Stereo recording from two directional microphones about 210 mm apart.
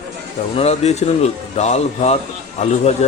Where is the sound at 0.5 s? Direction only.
30° left (ahead or behind).